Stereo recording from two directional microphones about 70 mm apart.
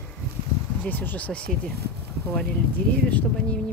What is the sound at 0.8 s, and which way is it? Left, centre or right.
Speech, left.